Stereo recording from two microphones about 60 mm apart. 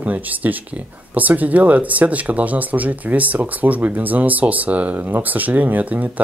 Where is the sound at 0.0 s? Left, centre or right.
Right.